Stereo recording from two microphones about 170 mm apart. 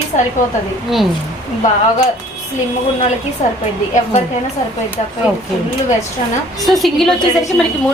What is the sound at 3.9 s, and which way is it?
Speech, 40° left (ahead or behind).